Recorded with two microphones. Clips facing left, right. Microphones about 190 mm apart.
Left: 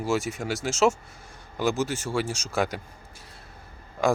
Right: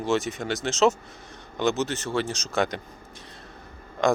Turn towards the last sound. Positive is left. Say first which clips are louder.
# right 1 dB
turn(degrees=10)  # may be behind; listen again after turning